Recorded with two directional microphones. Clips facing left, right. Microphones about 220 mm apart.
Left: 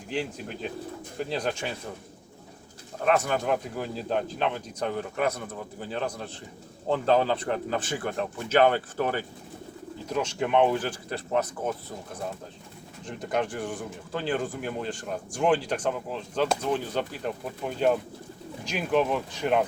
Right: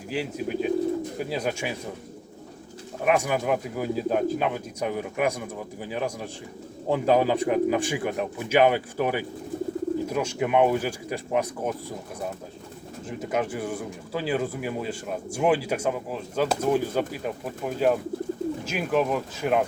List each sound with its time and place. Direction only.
0.1 s speech: 5° right (ahead or behind)
3.0 s speech: 10° right (ahead or behind)
13.1 s speech: 5° right (ahead or behind)